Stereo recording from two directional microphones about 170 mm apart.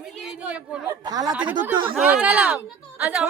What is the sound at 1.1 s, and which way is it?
Speech, 20° right (ahead or behind).